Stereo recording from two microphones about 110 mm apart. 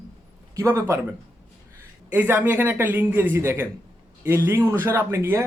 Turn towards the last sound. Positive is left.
turn(degrees=-25)  # may be behind; listen again after turning